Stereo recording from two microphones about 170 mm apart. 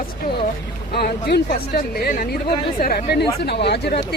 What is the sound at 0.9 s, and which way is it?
Speech, 70° left (ahead or behind).